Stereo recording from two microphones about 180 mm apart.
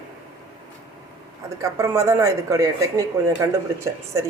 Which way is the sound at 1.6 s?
15° right (ahead or behind).